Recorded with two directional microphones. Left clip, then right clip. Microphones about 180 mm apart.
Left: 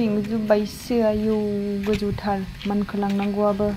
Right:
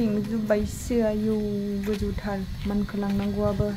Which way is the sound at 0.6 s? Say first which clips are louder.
Left 4 dB; 15° right (ahead or behind).